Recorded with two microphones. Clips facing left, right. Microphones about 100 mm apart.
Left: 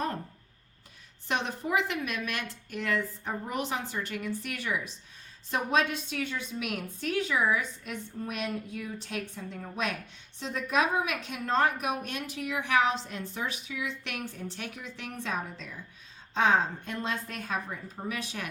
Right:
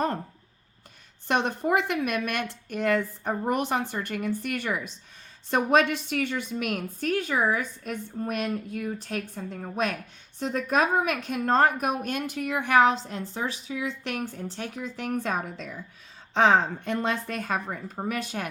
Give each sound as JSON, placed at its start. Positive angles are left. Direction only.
{"t": 1.3, "sound": "a woman's voice", "side_deg": -50}
{"t": 5.5, "sound": "a woman's voice", "side_deg": -65}
{"t": 16.3, "sound": "a woman's voice", "side_deg": -70}